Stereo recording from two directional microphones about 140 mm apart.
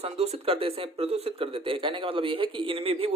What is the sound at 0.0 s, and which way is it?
Speech, 45° right (ahead or behind).